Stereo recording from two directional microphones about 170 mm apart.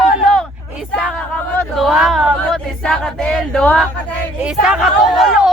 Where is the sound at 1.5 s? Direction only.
Centre (ahead or behind).